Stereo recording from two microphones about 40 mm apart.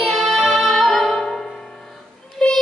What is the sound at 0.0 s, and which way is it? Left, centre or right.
Music, centre.